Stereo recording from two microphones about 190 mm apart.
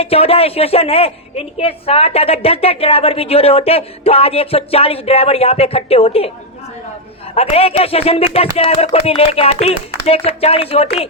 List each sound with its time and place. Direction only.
0.0 s a woman's voice: 30° left (ahead or behind)
7.3 s a woman's voice: 30° left (ahead or behind)